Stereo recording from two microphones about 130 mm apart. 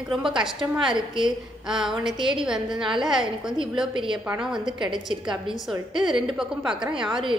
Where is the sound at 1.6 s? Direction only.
5° right (ahead or behind).